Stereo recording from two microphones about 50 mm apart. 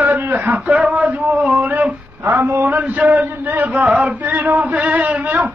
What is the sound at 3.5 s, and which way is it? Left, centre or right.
Chant, right.